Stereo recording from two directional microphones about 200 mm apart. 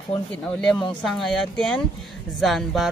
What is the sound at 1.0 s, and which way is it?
Speech, centre (ahead or behind).